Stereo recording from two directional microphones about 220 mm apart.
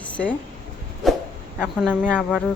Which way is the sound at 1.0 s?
Centre (ahead or behind).